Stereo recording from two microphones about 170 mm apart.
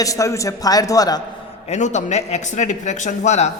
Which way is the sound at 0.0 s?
20° left (ahead or behind).